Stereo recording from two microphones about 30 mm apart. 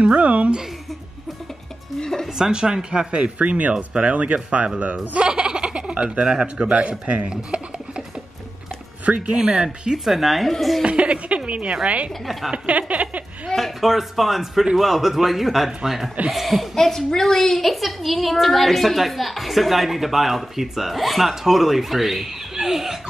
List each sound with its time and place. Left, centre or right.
0.0 s a sound: right
2.0 s music: left
2.3 s speech: right
3.3 s speech: right
5.3 s a sound: right
6.4 s speech: right
7.2 s a sound: right
9.2 s speech: right
10.0 s a woman's voice: centre
10.8 s a woman's voice: right
12.6 s a sound: right
13.6 s a woman's voice: centre
16.7 s a woman's voice: centre
17.6 s a woman's voice: centre